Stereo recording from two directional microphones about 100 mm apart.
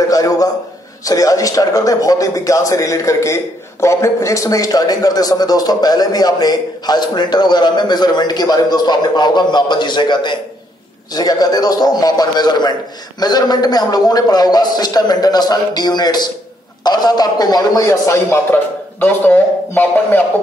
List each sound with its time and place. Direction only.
0.1 s a man's voice: 35° left (ahead or behind); by 20.2 s 20° left (ahead or behind)